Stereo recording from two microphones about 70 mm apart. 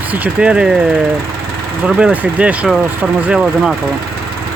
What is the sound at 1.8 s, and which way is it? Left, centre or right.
Speech, centre.